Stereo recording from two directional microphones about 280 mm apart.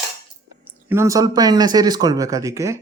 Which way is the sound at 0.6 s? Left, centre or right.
Centre.